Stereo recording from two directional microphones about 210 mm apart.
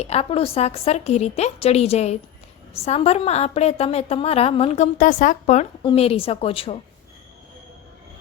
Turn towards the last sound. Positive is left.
turn(degrees=25)  # may be behind; listen again after turning